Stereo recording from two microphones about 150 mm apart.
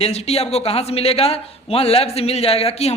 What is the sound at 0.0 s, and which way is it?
A man's voice, 45° left (ahead or behind).